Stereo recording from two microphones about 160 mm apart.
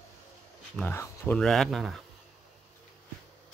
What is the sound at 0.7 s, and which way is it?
Speech, 15° left (ahead or behind).